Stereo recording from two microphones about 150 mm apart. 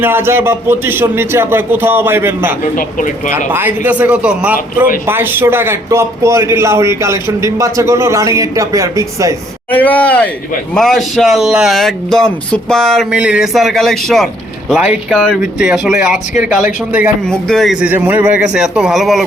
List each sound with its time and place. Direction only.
0.0 s a man's voice: 15° right (ahead or behind)
9.7 s a man's voice: 10° left (ahead or behind); by 17.1 s 10° right (ahead or behind)
17.2 s speech: 5° left (ahead or behind)